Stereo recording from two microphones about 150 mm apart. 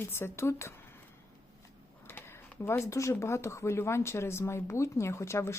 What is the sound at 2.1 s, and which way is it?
Speech, 15° left (ahead or behind).